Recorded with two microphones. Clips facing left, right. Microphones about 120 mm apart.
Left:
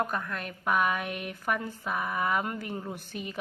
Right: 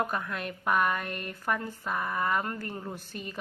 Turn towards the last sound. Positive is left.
turn(degrees=10)  # may be behind; listen again after turning